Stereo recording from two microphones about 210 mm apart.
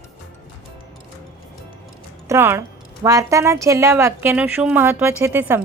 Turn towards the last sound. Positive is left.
turn(degrees=-10)  # may be behind; listen again after turning